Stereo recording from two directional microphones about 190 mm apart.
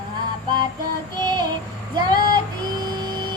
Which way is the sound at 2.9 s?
25° right (ahead or behind).